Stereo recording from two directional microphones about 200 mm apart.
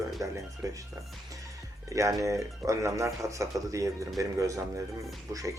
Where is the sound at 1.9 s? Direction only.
15° right (ahead or behind).